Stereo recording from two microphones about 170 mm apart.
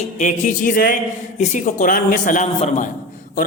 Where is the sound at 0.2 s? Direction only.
50° left (ahead or behind).